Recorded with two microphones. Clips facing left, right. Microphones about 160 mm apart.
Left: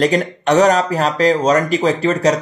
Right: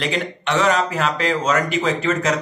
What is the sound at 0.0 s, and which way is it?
Speech, 40° left (ahead or behind).